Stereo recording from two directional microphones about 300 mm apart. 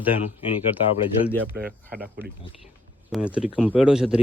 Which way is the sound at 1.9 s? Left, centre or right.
Centre.